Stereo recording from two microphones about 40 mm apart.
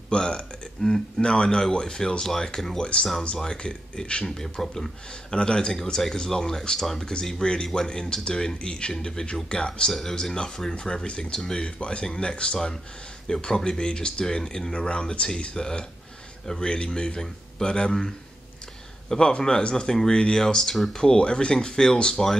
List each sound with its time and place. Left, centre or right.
0.1 s speech: left
0.8 s speech: centre
1.2 s speech: left
2.8 s speech: left
4.4 s speech: centre
5.3 s speech: left
7.4 s speech: left
11.8 s speech: left